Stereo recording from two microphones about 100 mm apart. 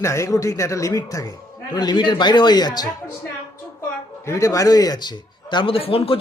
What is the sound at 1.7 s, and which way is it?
Speech, 45° left (ahead or behind).